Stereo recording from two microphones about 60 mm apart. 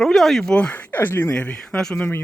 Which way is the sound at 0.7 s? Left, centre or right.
Left.